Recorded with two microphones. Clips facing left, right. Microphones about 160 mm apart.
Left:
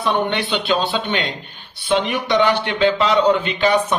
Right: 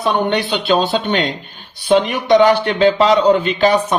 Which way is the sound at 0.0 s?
40° right (ahead or behind).